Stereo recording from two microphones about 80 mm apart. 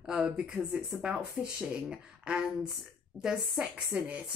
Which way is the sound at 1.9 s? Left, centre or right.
Centre.